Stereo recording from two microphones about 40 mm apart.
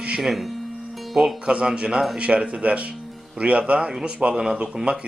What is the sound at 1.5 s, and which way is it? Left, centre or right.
Speech, right.